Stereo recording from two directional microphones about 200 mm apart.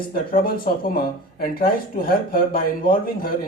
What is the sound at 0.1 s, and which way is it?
Speech, 45° left (ahead or behind).